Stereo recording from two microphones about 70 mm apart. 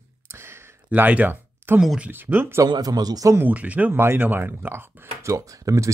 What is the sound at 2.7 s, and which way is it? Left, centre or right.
Speech, right.